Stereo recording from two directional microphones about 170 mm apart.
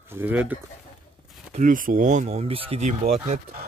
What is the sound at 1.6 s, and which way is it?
Speech, 50° right (ahead or behind).